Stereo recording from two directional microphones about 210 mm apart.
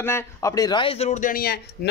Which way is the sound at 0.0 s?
15° left (ahead or behind).